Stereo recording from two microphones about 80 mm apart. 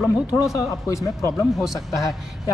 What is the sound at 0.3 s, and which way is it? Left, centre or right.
Speech, left.